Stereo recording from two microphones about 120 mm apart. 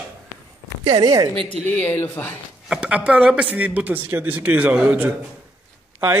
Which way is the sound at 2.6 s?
10° right (ahead or behind).